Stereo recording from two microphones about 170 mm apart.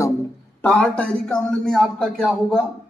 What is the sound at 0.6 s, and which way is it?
A man's voice, 5° left (ahead or behind).